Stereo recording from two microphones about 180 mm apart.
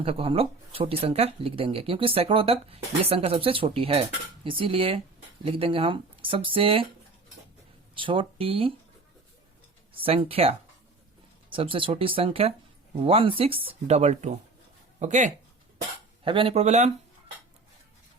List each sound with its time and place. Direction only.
0.0 s speech: 30° right (ahead or behind)
7.9 s speech: 30° right (ahead or behind)
9.9 s speech: 30° right (ahead or behind)
11.5 s speech: 30° right (ahead or behind)
16.2 s speech: 30° right (ahead or behind)